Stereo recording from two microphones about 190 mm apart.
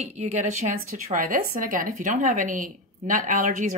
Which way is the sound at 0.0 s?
40° right (ahead or behind).